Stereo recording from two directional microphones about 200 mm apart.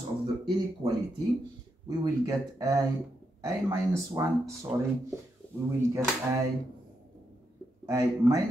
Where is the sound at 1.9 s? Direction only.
15° right (ahead or behind).